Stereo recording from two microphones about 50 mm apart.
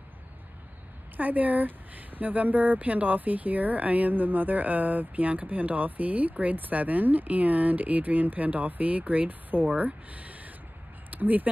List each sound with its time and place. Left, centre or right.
1.1 s speech: right